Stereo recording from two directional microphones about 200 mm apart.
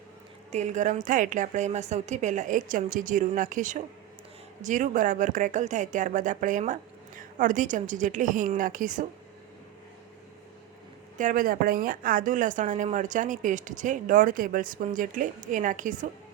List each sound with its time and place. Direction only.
0.5 s a woman's voice: 35° right (ahead or behind)
11.2 s a woman's voice: 40° right (ahead or behind)